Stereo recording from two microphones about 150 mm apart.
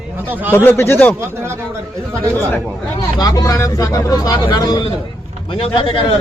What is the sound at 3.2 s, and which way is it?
A man's voice, 25° left (ahead or behind).